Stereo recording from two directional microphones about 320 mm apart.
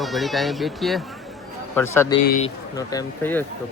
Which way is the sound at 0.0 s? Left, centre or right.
Centre.